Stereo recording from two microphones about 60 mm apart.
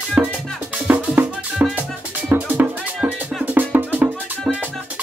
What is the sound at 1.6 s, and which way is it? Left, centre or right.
Music, right.